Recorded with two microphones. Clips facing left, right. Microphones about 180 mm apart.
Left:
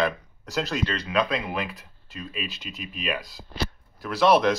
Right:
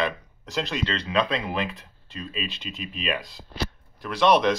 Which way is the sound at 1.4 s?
5° left (ahead or behind).